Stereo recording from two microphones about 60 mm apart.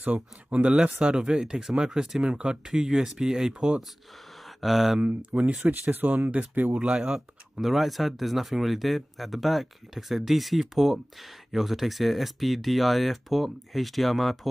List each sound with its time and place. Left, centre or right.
0.0 s speech: right; by 5.0 s centre
5.0 s speech: right
5.6 s speech: right
6.8 s speech: centre
7.5 s speech: centre